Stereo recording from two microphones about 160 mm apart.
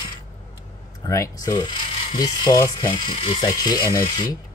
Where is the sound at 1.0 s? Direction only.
20° left (ahead or behind).